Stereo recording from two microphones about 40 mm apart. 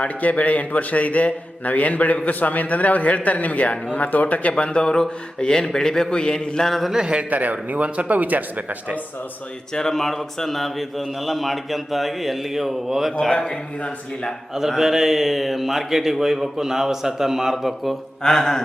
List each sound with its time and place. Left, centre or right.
0.2 s a man's voice: left
4.5 s speech: left
4.8 s a man's voice: centre
6.7 s a man's voice: centre
6.9 s a man's voice: centre
7.3 s speech: right
9.7 s a man's voice: centre
13.3 s speech: left
14.8 s a man's voice: centre
18.2 s a man's voice: centre